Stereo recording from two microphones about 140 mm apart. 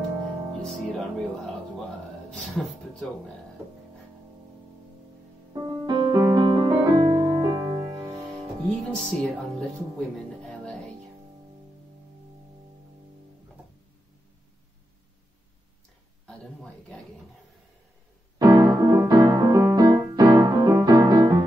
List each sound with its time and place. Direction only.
0.6 s music: 5° left (ahead or behind)
2.3 s speech: 5° left (ahead or behind)
5.5 s music: 30° right (ahead or behind)
8.6 s speech: 5° left (ahead or behind)
16.3 s a sound: 5° left (ahead or behind)
18.4 s piano: 25° right (ahead or behind)